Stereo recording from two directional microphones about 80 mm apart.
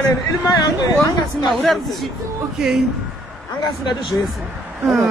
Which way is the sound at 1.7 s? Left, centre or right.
Centre.